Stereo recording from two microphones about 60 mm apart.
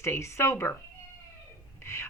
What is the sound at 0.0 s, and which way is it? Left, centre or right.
Speech, left.